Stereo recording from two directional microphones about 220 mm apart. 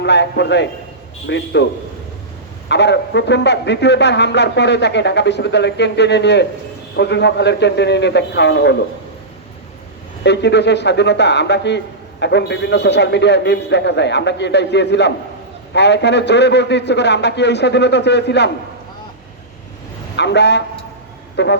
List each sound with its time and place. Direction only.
0.0 s a man's voice: 50° left (ahead or behind)
2.6 s a man's voice: 50° left (ahead or behind)
10.2 s a man's voice: 50° left (ahead or behind)
20.1 s a man's voice: 50° left (ahead or behind)